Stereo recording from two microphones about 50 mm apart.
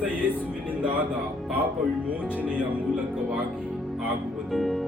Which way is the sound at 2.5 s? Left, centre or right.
Right.